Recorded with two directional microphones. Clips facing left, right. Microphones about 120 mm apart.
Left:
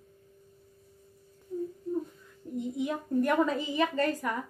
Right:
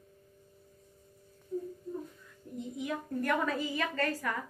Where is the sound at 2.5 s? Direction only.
20° left (ahead or behind).